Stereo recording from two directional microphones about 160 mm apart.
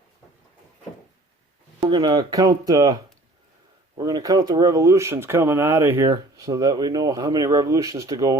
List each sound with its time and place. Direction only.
1.9 s speech: 25° right (ahead or behind)